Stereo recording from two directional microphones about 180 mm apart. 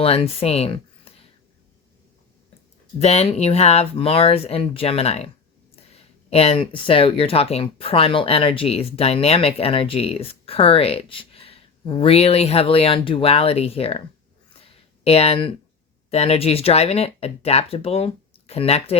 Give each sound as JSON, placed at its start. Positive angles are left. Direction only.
{"t": 0.0, "sound": "speech", "side_deg": 30}
{"t": 3.0, "sound": "speech", "side_deg": 35}
{"t": 6.3, "sound": "speech", "side_deg": 35}
{"t": 14.6, "sound": "a sound", "side_deg": 35}
{"t": 16.0, "sound": "speech", "side_deg": 35}